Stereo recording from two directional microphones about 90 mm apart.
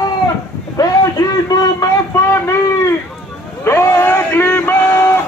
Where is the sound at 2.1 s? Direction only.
30° left (ahead or behind).